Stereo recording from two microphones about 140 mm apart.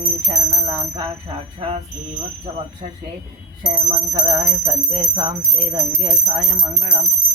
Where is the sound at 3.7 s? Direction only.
30° right (ahead or behind).